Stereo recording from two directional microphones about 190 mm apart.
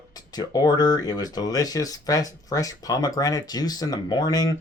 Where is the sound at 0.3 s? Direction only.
20° left (ahead or behind).